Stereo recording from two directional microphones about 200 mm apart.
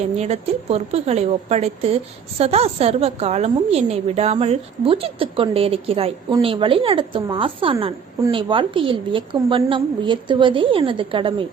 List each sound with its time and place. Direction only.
0.0 s a woman's voice: 30° right (ahead or behind)